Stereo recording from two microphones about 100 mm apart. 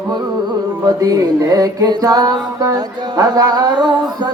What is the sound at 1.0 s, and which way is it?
Music, 35° right (ahead or behind).